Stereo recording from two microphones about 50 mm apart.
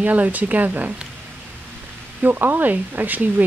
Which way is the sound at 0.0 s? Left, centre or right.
Right.